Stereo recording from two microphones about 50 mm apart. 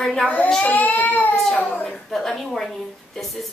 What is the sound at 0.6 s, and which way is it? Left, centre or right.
Crying, left.